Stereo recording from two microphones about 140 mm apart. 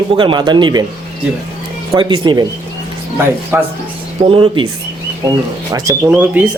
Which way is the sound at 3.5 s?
15° right (ahead or behind).